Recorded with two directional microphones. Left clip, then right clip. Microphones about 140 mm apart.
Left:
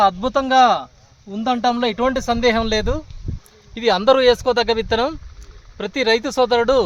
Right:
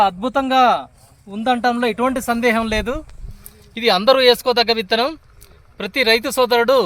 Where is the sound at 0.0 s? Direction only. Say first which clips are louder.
Even; 30° left (ahead or behind).